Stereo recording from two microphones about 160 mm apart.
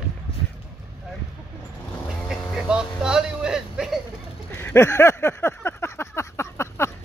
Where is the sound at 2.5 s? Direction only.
5° right (ahead or behind).